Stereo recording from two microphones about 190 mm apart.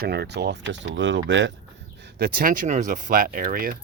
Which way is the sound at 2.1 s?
50° right (ahead or behind).